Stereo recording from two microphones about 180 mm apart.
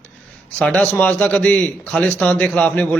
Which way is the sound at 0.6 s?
5° left (ahead or behind).